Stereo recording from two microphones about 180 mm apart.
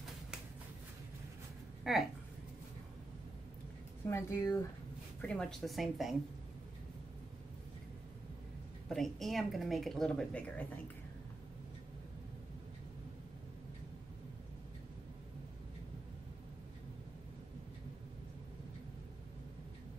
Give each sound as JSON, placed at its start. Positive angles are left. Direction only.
{"t": 1.9, "sound": "speech", "side_deg": 0}
{"t": 4.1, "sound": "speech", "side_deg": 20}
{"t": 5.2, "sound": "speech", "side_deg": 5}
{"t": 8.8, "sound": "speech", "side_deg": 0}